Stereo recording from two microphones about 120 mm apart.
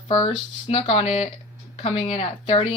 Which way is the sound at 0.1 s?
45° left (ahead or behind).